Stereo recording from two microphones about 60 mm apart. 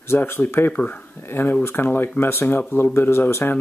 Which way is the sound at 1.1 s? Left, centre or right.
Left.